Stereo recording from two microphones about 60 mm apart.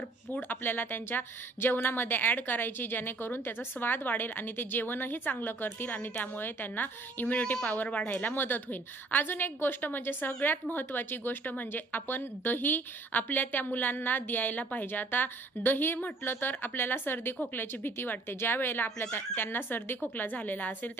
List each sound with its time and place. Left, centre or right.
0.3 s a woman's voice: left